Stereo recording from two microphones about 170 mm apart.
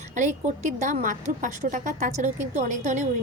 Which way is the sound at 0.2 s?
45° right (ahead or behind).